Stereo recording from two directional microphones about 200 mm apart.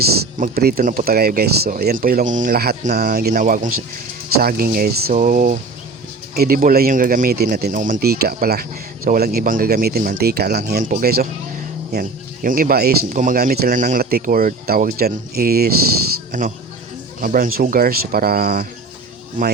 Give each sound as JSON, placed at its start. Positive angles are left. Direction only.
{"t": 0.3, "sound": "speech", "side_deg": -45}
{"t": 17.2, "sound": "speech", "side_deg": -45}